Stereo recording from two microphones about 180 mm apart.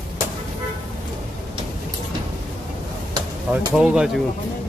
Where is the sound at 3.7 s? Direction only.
5° right (ahead or behind).